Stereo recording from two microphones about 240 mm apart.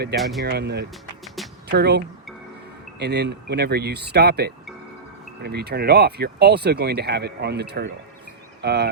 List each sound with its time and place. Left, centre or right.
0.2 s speech: centre
0.4 s speech: right